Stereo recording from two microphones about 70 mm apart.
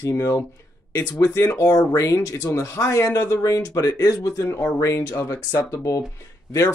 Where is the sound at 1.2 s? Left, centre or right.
Left.